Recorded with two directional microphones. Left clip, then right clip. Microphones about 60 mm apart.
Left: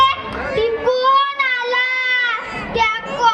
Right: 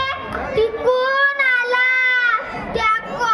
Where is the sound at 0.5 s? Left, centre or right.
Right.